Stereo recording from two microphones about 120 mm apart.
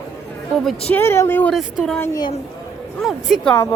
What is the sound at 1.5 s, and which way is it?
Speech, centre (ahead or behind).